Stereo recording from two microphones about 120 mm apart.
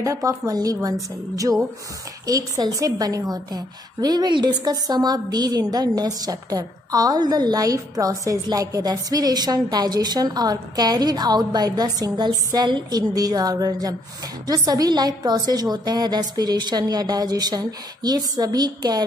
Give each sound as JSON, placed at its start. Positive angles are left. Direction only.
{"t": 0.0, "sound": "a woman's voice", "side_deg": -25}